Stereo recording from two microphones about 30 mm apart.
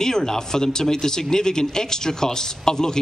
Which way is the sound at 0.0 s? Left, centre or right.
Centre.